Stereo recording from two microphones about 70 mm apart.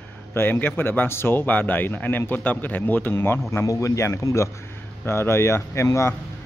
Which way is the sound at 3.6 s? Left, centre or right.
Left.